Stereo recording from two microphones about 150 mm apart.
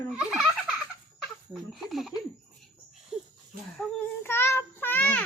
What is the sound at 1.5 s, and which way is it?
Speech, centre (ahead or behind).